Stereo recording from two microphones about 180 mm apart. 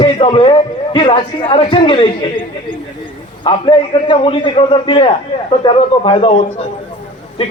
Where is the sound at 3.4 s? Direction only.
30° left (ahead or behind).